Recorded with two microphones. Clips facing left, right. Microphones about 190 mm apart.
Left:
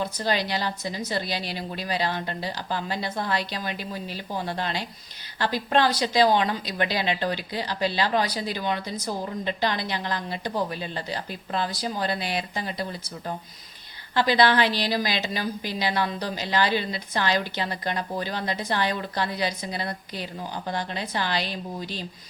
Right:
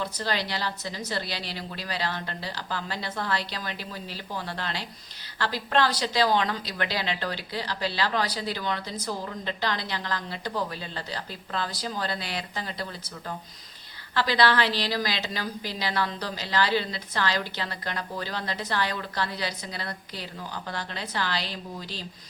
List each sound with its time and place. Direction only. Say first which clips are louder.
0.0 s a woman's voice: left 4 dB; 15° left (ahead or behind)